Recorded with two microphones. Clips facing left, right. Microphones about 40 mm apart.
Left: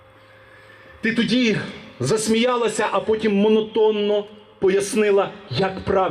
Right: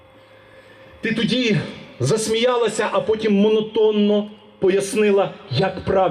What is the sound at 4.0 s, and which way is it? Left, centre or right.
A man's voice, centre.